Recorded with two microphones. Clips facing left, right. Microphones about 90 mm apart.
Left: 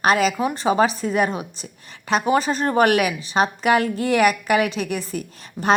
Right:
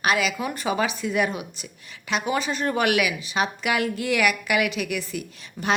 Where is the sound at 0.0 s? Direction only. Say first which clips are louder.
Left 5 dB; 40° left (ahead or behind).